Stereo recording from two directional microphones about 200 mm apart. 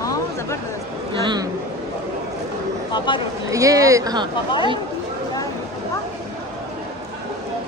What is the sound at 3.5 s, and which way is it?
Speech, 15° right (ahead or behind).